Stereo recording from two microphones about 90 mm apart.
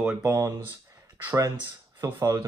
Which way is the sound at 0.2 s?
35° right (ahead or behind).